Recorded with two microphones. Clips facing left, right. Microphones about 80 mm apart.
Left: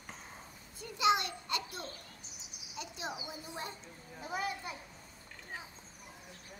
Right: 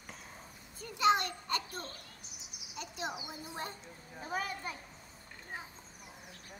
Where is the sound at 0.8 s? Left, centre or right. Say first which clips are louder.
Right 1 dB; right.